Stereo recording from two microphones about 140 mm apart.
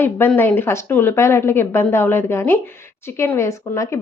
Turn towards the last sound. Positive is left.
turn(degrees=20)  # may be behind; listen again after turning